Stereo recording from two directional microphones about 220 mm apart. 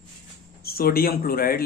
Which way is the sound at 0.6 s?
45° left (ahead or behind).